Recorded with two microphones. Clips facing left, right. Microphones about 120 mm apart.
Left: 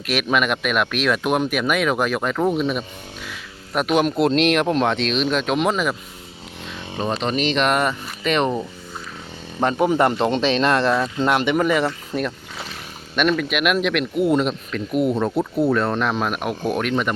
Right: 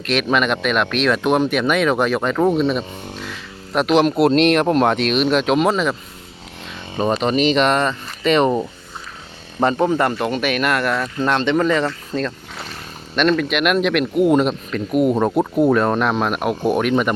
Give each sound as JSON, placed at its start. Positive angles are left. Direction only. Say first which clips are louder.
{"t": 0.0, "sound": "speech", "louder": "right 2 dB", "side_deg": 5}
{"t": 7.0, "sound": "speech", "louder": "right 5 dB", "side_deg": -5}
{"t": 9.6, "sound": "speech", "louder": "right 3 dB", "side_deg": 0}
{"t": 9.8, "sound": "speech", "louder": "even", "side_deg": 15}